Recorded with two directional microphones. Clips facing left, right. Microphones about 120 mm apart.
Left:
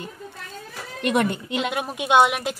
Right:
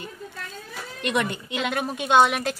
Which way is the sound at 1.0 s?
45° left (ahead or behind).